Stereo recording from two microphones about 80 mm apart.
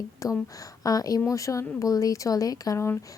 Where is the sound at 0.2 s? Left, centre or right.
Left.